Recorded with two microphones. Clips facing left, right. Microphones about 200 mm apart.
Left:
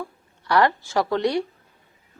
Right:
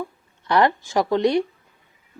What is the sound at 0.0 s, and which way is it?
A woman's voice, 20° right (ahead or behind).